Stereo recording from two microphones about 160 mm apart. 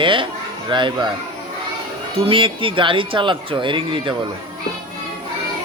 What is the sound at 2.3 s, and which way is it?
Speech, 35° right (ahead or behind).